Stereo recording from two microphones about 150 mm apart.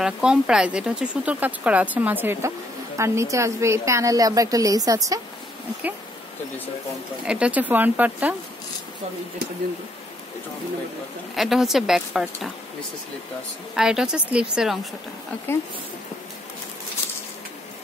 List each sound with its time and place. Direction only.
0.0 s a woman's voice: 5° right (ahead or behind); by 5.2 s 25° right (ahead or behind)
7.2 s speech: 5° right (ahead or behind)
11.3 s a woman's voice: centre (ahead or behind)
13.7 s a woman's voice: 5° right (ahead or behind)